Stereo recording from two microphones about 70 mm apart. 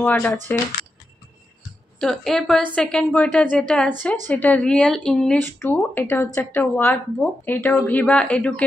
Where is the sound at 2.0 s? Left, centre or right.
Centre.